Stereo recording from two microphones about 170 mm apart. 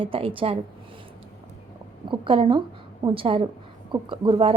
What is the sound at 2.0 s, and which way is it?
A woman's voice, 30° right (ahead or behind).